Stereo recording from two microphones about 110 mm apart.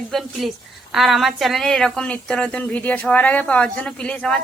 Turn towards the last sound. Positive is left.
turn(degrees=10)  # may be behind; listen again after turning